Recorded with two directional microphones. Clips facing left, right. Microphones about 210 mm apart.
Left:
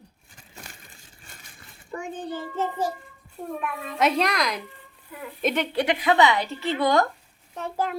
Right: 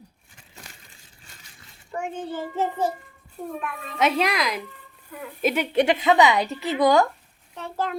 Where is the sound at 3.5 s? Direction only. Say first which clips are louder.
Even; centre (ahead or behind).